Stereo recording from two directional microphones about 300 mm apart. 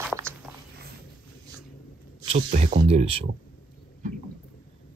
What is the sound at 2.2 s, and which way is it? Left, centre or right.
Speech, right.